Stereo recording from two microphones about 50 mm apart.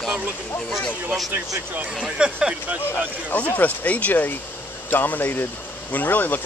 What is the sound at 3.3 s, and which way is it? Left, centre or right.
Speech, left.